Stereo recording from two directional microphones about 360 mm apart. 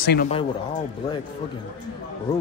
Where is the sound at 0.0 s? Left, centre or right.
Left.